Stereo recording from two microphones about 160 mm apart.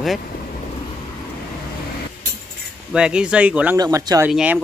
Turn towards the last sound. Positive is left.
turn(degrees=-5)  # may be behind; listen again after turning